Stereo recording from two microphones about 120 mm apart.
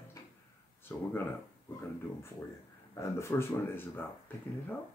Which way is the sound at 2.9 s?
20° left (ahead or behind).